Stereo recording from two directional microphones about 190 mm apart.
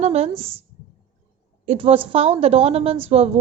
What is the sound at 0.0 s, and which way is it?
Speech, 35° right (ahead or behind).